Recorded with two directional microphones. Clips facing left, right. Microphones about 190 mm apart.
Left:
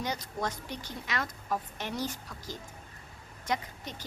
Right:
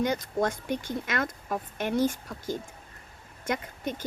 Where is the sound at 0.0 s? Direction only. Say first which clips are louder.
Right 7 dB; 50° right (ahead or behind).